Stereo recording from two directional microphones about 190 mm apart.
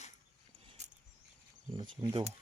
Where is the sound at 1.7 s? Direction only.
25° right (ahead or behind).